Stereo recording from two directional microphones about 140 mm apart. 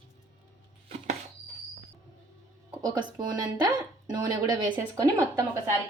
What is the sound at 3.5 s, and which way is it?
A woman's voice, 30° right (ahead or behind).